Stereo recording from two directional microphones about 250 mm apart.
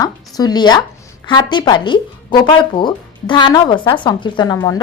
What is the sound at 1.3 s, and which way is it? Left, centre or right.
Speech, centre.